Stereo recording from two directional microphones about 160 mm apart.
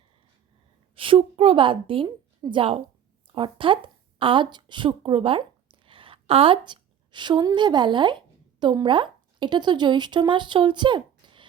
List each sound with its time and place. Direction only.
0.9 s a woman's voice: 35° right (ahead or behind)